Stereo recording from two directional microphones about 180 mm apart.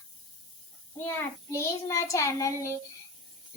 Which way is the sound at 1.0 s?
15° left (ahead or behind).